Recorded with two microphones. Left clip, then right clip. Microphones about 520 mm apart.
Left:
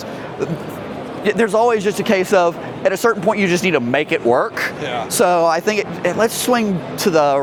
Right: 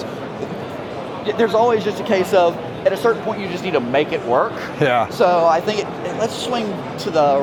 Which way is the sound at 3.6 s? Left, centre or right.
Left.